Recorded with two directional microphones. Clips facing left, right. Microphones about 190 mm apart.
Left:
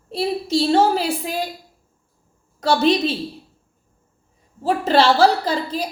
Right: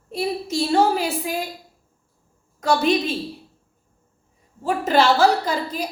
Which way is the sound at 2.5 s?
30° left (ahead or behind).